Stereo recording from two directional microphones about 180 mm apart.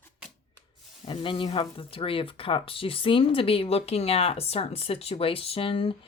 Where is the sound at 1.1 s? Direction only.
30° left (ahead or behind).